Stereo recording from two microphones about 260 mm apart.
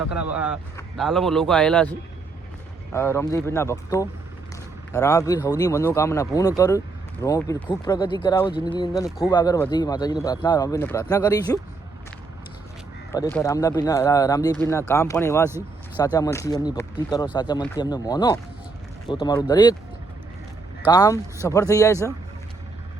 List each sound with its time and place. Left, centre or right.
0.0 s a man's voice: centre
9.0 s a man's voice: centre
9.3 s speech: centre
13.1 s speech: centre
20.8 s speech: centre